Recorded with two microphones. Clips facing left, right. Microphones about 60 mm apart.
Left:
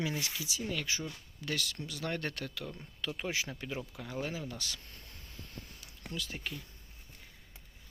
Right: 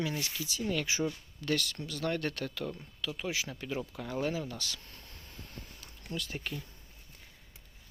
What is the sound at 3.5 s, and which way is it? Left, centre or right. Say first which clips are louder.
Speech: right 3 dB; centre.